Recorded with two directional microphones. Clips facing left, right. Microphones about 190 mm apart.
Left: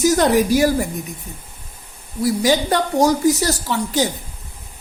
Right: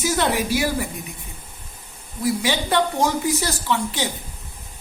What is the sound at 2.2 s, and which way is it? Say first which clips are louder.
A woman's voice: left 5 dB; 40° left (ahead or behind).